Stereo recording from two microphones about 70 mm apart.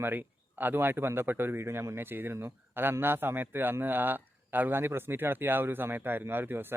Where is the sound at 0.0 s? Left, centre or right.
Right.